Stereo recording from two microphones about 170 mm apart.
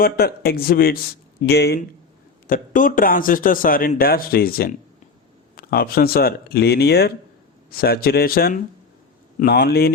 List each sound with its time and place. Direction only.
0.0 s speech: 65° left (ahead or behind)
1.4 s speech: 75° left (ahead or behind)
2.5 s speech: 55° left (ahead or behind); by 9.9 s 70° left (ahead or behind)